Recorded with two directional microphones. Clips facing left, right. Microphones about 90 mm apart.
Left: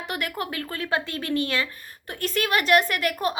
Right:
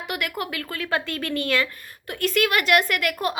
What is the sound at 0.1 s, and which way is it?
A woman's voice, 30° left (ahead or behind).